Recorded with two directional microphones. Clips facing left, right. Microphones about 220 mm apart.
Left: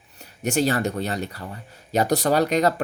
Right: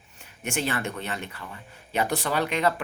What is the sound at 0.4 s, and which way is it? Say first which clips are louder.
Speech: left 7 dB; 40° left (ahead or behind).